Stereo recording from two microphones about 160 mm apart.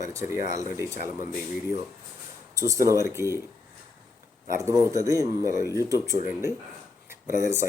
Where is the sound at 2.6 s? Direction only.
20° right (ahead or behind).